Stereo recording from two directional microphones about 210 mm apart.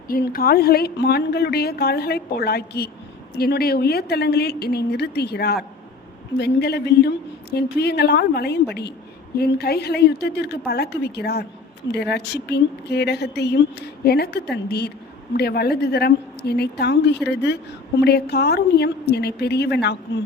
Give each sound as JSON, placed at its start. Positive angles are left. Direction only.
{"t": 0.1, "sound": "a woman's voice", "side_deg": 45}